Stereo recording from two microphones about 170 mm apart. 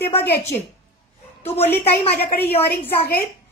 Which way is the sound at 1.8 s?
65° left (ahead or behind).